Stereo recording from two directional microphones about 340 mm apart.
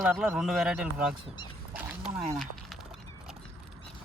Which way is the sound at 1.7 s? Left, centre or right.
Centre.